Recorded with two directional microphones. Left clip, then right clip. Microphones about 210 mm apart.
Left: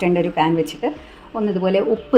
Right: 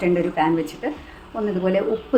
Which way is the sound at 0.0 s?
30° left (ahead or behind).